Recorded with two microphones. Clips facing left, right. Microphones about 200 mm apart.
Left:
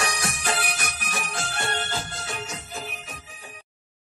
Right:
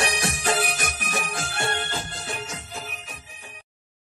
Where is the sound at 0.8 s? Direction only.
50° right (ahead or behind).